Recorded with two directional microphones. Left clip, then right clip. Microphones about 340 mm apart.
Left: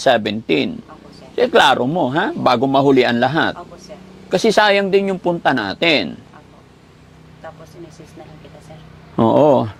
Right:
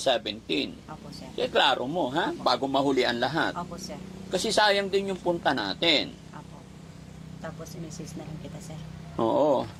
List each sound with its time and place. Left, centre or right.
0.0 s speech: left
9.1 s speech: left